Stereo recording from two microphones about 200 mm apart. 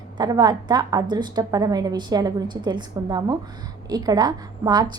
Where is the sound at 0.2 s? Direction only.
20° right (ahead or behind).